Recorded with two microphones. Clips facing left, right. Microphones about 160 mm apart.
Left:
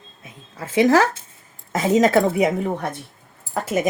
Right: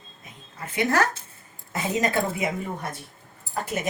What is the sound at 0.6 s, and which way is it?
A woman's voice, 90° left.